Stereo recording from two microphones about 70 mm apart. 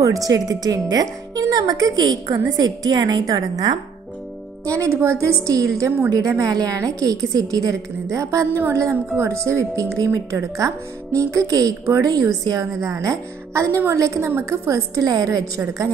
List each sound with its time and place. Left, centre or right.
0.0 s a woman's voice: right
3.3 s a woman's voice: right
4.6 s speech: right
5.5 s a woman's voice: right
14.7 s speech: right